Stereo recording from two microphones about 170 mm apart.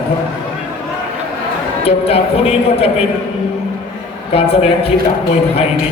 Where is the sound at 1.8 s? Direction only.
35° left (ahead or behind).